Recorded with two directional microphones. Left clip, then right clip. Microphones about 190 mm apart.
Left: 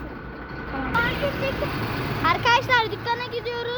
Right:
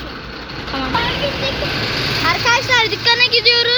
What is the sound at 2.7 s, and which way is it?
Speech, 10° right (ahead or behind).